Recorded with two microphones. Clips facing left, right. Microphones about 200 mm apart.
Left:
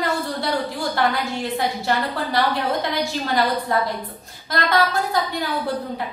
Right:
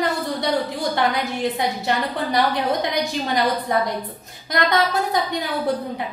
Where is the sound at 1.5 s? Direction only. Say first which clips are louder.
Even; 20° right (ahead or behind).